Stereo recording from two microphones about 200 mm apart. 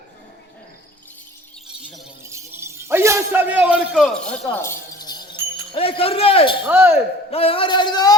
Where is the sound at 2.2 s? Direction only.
15° right (ahead or behind); by 5.2 s 20° left (ahead or behind).